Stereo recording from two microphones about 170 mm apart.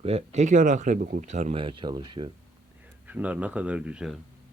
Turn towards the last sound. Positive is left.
turn(degrees=-5)  # may be behind; listen again after turning